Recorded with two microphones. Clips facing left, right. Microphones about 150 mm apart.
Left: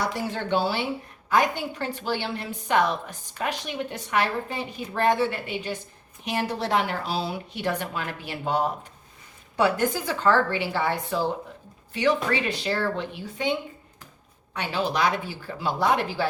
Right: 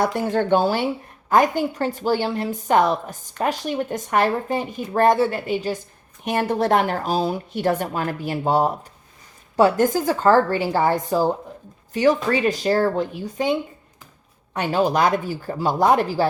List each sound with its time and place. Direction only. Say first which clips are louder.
0.0 s a woman's voice: right 8 dB; 50° right (ahead or behind)
6.2 s a woman's voice: right 7 dB; 50° right (ahead or behind)
14.5 s a woman's voice: right 7 dB; 45° right (ahead or behind)